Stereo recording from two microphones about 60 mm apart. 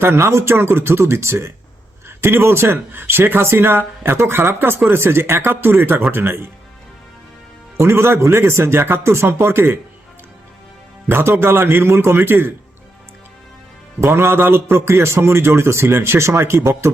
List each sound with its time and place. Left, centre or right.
0.0 s a man's voice: right
7.8 s a man's voice: right
11.1 s speech: right
14.0 s a man's voice: right